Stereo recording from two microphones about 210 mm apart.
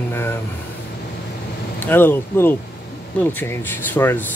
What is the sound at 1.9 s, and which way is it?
A man's voice, 10° left (ahead or behind).